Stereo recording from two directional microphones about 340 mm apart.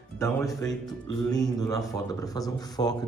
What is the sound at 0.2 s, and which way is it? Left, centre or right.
Speech, centre.